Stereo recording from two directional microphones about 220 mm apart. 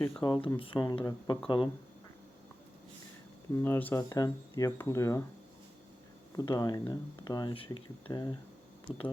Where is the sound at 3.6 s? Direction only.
10° left (ahead or behind).